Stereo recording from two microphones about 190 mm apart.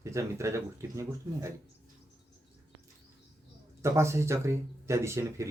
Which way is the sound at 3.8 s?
15° right (ahead or behind).